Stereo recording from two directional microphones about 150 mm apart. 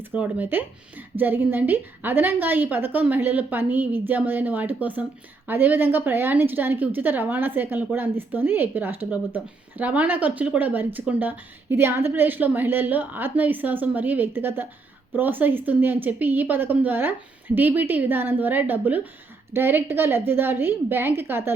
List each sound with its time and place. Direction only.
0.0 s a woman's voice: 10° right (ahead or behind)